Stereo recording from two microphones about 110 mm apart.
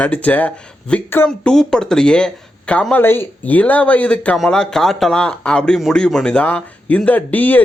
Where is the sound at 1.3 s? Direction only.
5° left (ahead or behind).